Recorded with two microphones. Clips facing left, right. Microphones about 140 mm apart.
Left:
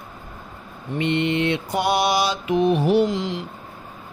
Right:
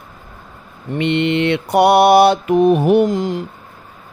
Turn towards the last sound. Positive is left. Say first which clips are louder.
# right 5 dB
turn(degrees=-45)  # may be behind; listen again after turning